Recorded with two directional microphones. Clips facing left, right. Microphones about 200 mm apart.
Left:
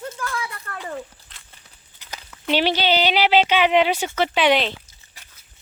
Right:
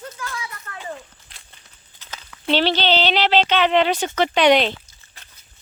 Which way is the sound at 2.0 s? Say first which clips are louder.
Right 2 dB; 10° left (ahead or behind).